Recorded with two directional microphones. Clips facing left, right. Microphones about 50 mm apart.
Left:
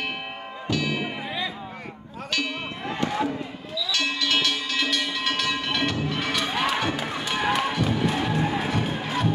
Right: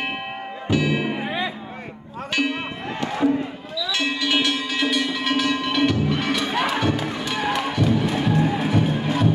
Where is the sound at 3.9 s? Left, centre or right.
Centre.